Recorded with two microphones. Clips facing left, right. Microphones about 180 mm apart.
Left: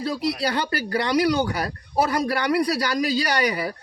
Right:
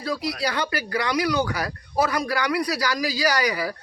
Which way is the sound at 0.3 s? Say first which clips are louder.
Left 1 dB; 30° left (ahead or behind).